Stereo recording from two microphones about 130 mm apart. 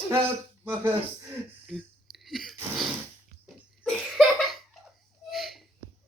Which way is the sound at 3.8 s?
Centre (ahead or behind).